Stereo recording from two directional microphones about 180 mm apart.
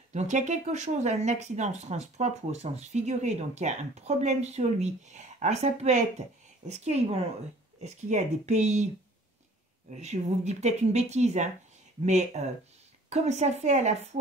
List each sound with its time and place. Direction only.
0.1 s speech: 40° right (ahead or behind)
9.9 s speech: 40° right (ahead or behind)